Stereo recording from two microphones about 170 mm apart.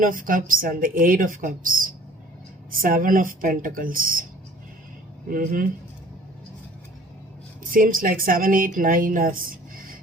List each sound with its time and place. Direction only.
0.0 s a woman's voice: 55° right (ahead or behind)
5.3 s a woman's voice: 55° right (ahead or behind)
7.6 s a woman's voice: 55° right (ahead or behind)